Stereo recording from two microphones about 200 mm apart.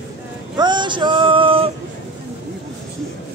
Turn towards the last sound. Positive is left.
turn(degrees=-25)  # may be behind; listen again after turning